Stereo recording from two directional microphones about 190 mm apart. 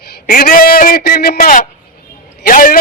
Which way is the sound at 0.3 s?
50° left (ahead or behind).